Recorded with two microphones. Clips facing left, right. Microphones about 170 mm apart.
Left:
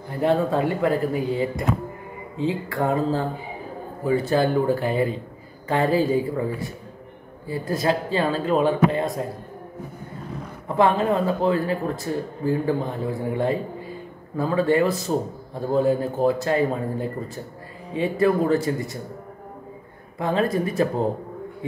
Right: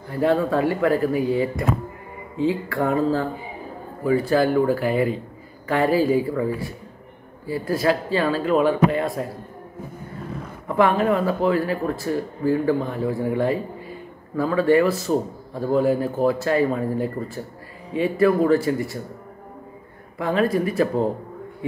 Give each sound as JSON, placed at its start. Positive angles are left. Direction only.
{"t": 0.1, "sound": "speech", "side_deg": 20}
{"t": 10.8, "sound": "speech", "side_deg": 25}
{"t": 20.2, "sound": "speech", "side_deg": 20}